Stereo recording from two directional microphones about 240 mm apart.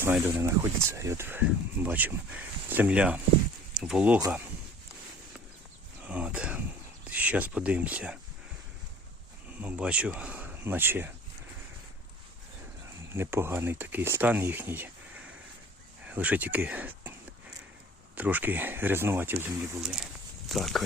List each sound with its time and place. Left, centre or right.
0.0 s speech: centre
6.1 s a sound: centre
7.0 s speech: centre
9.6 s speech: centre
13.1 s speech: centre
18.1 s speech: centre